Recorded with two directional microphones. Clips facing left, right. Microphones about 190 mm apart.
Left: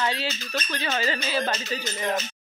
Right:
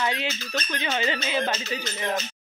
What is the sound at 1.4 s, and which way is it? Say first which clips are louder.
Speech: even; 5° right (ahead or behind).